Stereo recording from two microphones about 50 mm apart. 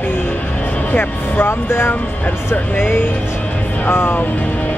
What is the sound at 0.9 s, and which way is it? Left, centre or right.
Speech, left.